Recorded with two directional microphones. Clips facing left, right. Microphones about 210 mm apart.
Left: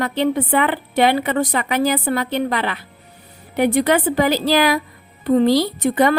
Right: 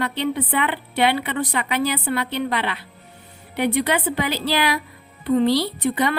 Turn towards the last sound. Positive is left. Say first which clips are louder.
# left 5 dB
turn(degrees=45)  # may be behind; listen again after turning